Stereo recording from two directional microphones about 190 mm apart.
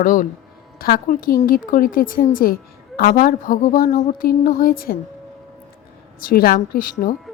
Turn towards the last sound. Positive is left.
turn(degrees=45)  # may be behind; listen again after turning